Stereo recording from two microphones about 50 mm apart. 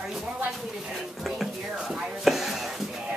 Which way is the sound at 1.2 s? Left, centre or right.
Centre.